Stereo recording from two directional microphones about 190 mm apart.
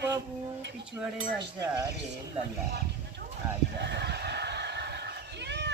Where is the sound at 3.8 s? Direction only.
65° right (ahead or behind).